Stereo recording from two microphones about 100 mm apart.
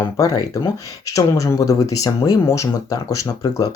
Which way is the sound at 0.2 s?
35° left (ahead or behind).